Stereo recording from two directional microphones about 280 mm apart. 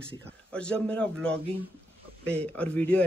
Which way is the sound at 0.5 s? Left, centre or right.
Centre.